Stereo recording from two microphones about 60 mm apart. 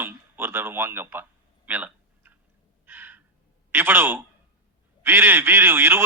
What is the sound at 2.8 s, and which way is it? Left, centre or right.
Crow, right.